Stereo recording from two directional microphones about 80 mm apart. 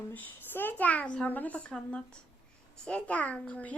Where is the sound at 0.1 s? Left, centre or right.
Left.